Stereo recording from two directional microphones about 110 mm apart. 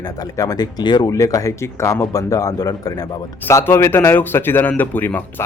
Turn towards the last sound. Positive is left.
turn(degrees=15)  # may be behind; listen again after turning